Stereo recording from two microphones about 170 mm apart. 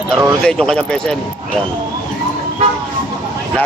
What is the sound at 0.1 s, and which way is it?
Speech, 15° right (ahead or behind).